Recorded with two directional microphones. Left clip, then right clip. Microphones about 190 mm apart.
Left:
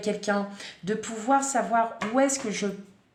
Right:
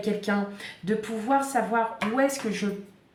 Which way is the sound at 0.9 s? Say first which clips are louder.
Left 1 dB; 40° left (ahead or behind).